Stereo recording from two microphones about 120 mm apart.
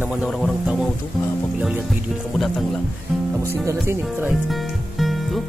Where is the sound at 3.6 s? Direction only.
20° right (ahead or behind).